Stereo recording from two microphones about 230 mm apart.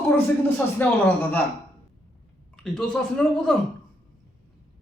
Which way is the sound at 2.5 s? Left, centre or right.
Centre.